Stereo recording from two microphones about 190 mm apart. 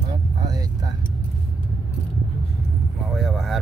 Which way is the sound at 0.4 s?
20° right (ahead or behind).